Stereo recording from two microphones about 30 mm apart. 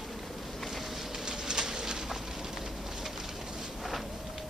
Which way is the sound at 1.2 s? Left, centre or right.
Right.